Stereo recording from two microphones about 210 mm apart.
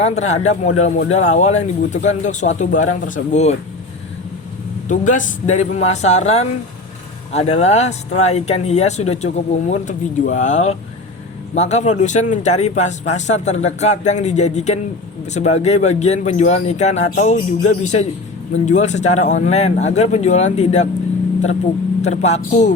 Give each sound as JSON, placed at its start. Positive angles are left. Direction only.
{"t": 0.0, "sound": "speech", "side_deg": 30}
{"t": 4.9, "sound": "speech", "side_deg": 35}
{"t": 22.0, "sound": "speech", "side_deg": 30}